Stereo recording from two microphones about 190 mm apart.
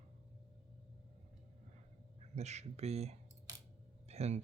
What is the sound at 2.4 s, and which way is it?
Speech, 35° right (ahead or behind).